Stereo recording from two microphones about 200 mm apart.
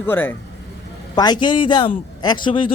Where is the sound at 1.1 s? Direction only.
20° left (ahead or behind).